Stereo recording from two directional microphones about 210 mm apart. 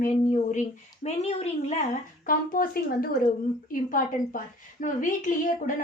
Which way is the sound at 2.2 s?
40° left (ahead or behind).